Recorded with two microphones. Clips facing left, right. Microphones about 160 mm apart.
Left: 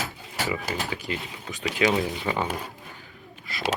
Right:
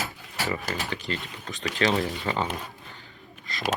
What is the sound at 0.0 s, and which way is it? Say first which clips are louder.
Mechanisms: left 1 dB; 20° left (ahead or behind).